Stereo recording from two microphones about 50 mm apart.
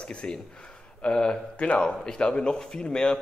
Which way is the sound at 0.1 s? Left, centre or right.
Left.